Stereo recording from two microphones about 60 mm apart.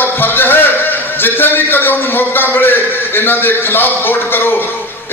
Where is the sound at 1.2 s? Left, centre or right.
Left.